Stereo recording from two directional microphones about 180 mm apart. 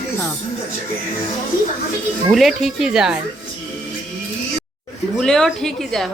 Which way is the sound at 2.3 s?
Centre (ahead or behind).